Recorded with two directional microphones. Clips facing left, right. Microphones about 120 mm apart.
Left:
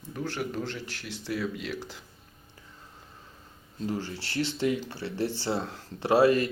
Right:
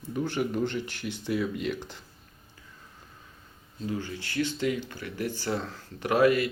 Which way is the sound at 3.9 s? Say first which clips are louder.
Even; 35° left (ahead or behind).